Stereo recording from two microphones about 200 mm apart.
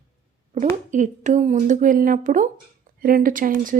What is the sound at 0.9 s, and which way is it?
Speech, 40° right (ahead or behind).